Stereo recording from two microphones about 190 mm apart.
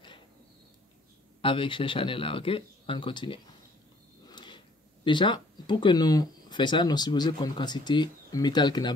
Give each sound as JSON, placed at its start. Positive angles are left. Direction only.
{"t": 1.4, "sound": "speech", "side_deg": 25}
{"t": 4.3, "sound": "a sound", "side_deg": 25}
{"t": 5.0, "sound": "speech", "side_deg": 25}